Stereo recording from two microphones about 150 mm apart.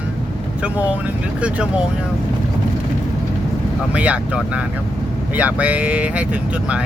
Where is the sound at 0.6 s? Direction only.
10° right (ahead or behind).